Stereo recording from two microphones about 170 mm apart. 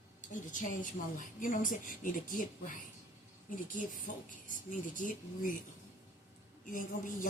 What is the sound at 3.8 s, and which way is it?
Speech, 50° left (ahead or behind).